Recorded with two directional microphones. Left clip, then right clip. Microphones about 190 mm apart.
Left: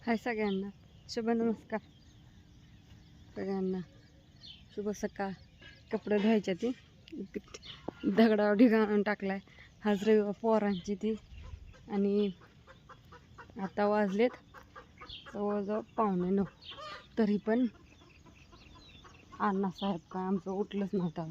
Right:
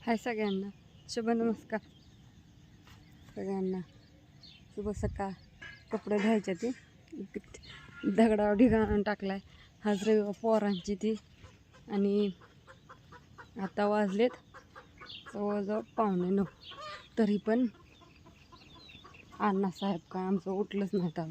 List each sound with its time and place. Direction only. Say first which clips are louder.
0.0 s a man's voice: even; centre (ahead or behind)
3.3 s a man's voice: even; 5° right (ahead or behind)
12.6 s chicken: even; 20° left (ahead or behind)
13.6 s speech: even; centre (ahead or behind)
17.2 s a man's voice: right 1 dB; 5° left (ahead or behind)
19.4 s a man's voice: right 1 dB; 10° right (ahead or behind)